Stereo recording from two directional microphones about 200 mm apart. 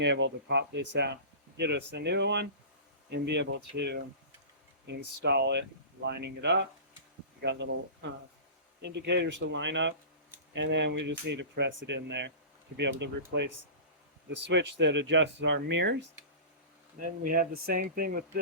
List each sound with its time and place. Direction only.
0.0 s speech: 60° right (ahead or behind)
8.9 s speech: 60° right (ahead or behind)
17.2 s speech: 45° right (ahead or behind)